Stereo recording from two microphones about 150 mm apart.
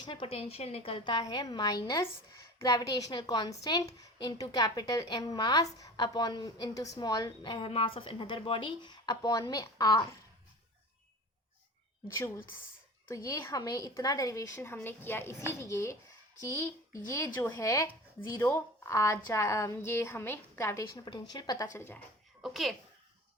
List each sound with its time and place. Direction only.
0.0 s a woman's voice: 35° left (ahead or behind)
12.0 s a woman's voice: 20° left (ahead or behind)
22.4 s a child's voice: centre (ahead or behind)